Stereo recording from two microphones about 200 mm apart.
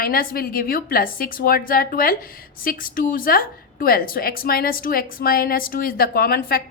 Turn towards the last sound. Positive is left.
turn(degrees=50)  # may be behind; listen again after turning